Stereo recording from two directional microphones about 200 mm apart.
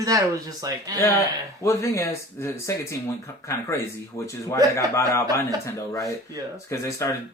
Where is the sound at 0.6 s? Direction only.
15° right (ahead or behind).